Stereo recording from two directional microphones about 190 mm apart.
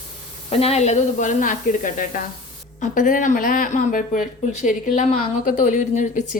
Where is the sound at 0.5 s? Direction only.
30° left (ahead or behind).